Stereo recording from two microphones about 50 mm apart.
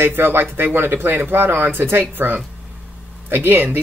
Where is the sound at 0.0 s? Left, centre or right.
Right.